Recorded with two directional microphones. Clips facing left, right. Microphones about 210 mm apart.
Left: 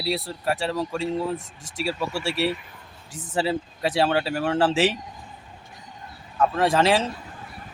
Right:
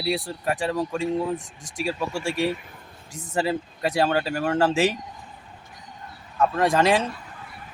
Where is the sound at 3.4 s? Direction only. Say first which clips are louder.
Even; 5° left (ahead or behind).